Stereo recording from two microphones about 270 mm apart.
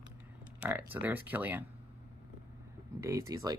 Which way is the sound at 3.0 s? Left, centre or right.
Centre.